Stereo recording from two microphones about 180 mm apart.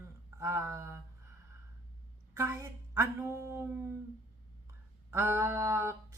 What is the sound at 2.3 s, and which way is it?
Speech, 15° right (ahead or behind).